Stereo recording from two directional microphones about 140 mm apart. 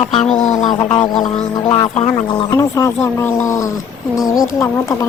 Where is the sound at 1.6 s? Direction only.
40° left (ahead or behind).